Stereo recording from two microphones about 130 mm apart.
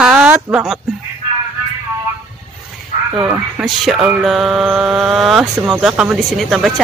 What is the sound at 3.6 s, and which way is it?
Mantra, centre (ahead or behind).